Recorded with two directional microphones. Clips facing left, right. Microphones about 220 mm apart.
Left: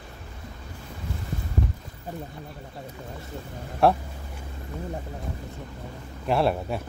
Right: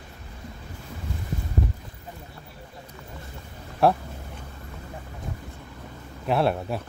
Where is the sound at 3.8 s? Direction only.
Centre (ahead or behind).